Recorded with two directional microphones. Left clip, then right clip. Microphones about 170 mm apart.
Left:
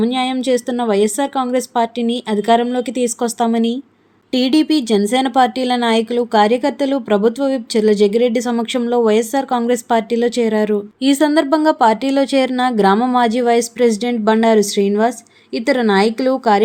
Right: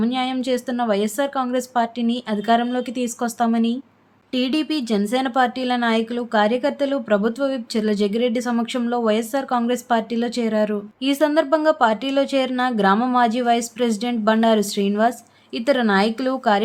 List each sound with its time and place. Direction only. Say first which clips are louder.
0.0 s speech: left 5 dB; 25° left (ahead or behind)